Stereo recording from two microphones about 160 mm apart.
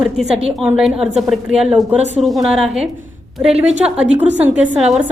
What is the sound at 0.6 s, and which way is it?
Speech, centre (ahead or behind).